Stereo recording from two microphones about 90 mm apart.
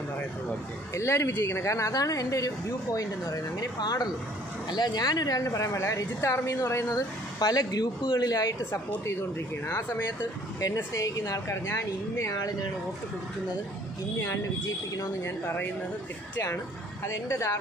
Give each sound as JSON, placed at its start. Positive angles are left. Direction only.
{"t": 0.9, "sound": "a woman's voice", "side_deg": 30}
{"t": 9.7, "sound": "a woman's voice", "side_deg": 30}
{"t": 15.0, "sound": "speech", "side_deg": 30}
{"t": 17.0, "sound": "a woman's voice", "side_deg": 35}